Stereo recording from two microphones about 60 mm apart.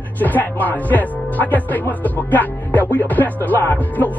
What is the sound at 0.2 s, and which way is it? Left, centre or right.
Speech, left.